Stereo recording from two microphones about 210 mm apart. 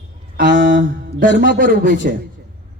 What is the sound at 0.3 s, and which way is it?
Mantra, 45° right (ahead or behind).